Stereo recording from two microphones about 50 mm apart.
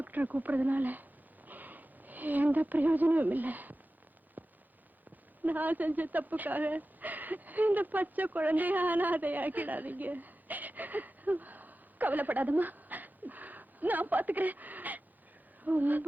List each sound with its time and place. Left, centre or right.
0.0 s speech: right
4.4 s a sound: right
5.4 s speech: right